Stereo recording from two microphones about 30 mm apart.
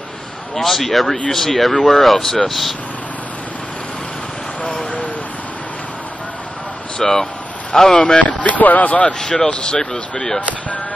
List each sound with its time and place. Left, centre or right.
0.6 s speech: centre
7.0 s speech: centre
8.2 s speech: left
9.2 s speech: centre
9.5 s speech: left
10.1 s speech: centre